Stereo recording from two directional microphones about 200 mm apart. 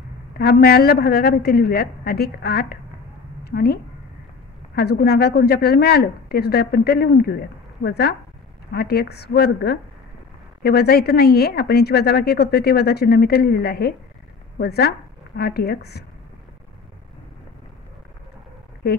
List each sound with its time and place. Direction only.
0.4 s a woman's voice: 50° left (ahead or behind)